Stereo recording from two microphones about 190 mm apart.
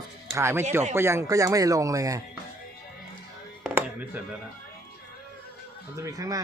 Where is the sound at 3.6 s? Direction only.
10° right (ahead or behind).